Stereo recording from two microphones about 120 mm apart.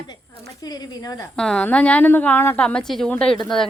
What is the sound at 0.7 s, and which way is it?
Speech, 30° left (ahead or behind).